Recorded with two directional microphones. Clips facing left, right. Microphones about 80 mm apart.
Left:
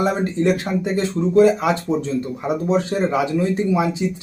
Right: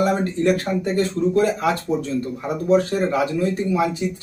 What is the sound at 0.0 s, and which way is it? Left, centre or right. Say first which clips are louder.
Speech: even; left.